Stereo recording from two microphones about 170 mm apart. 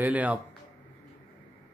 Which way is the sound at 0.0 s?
10° right (ahead or behind).